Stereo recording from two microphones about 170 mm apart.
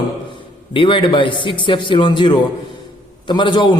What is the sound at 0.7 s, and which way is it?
A man's voice, 30° left (ahead or behind).